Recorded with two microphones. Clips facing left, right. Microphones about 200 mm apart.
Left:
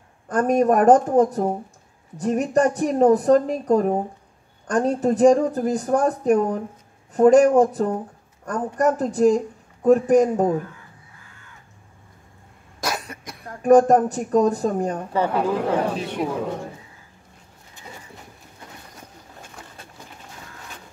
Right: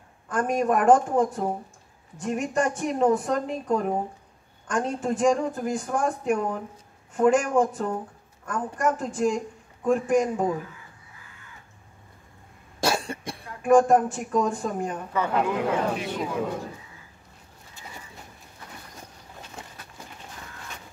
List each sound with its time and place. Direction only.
0.3 s speech: 40° left (ahead or behind)
12.8 s cough: 30° right (ahead or behind)
13.5 s speech: 40° left (ahead or behind)
19.6 s a sound: 25° right (ahead or behind)